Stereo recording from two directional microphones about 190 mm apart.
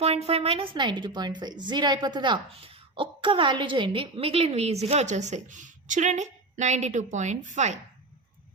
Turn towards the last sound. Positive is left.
turn(degrees=-40)  # may be behind; listen again after turning